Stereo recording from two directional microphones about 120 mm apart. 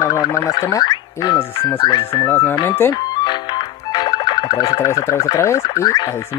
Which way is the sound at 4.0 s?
35° left (ahead or behind).